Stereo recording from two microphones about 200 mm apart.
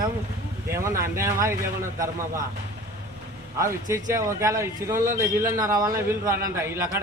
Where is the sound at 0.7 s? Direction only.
15° right (ahead or behind).